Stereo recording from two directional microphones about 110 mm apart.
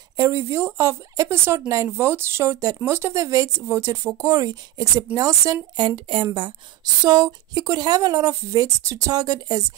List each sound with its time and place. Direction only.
0.2 s speech: 25° right (ahead or behind)
5.8 s speech: 50° right (ahead or behind)
7.0 s speech: 40° right (ahead or behind)